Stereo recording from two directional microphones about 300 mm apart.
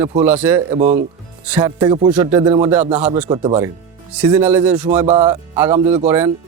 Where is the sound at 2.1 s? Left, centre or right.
Centre.